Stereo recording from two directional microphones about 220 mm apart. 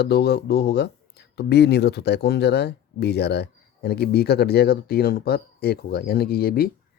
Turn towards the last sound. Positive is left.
turn(degrees=45)  # may be behind; listen again after turning